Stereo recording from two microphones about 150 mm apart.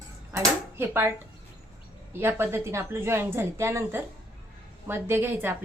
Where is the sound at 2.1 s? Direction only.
15° right (ahead or behind).